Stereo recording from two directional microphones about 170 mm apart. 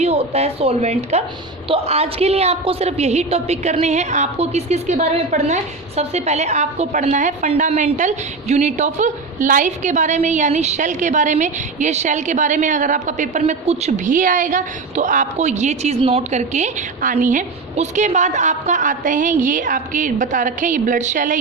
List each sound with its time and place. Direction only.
0.0 s a woman's voice: 40° right (ahead or behind)